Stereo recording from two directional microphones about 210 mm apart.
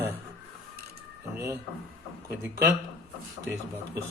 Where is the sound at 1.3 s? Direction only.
15° right (ahead or behind).